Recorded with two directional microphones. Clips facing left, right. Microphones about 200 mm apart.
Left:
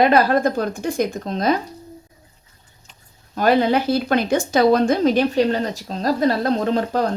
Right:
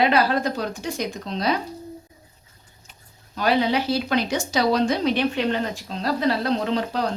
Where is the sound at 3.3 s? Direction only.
50° left (ahead or behind).